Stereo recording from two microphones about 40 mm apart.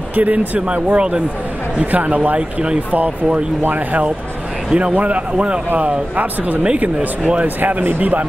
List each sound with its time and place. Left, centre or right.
0.1 s speech: right
0.7 s speech: right
3.6 s speech: right
4.7 s a man's voice: right
5.8 s speech: right
7.4 s speech: right